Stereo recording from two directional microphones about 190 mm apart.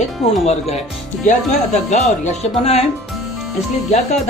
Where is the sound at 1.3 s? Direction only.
35° left (ahead or behind).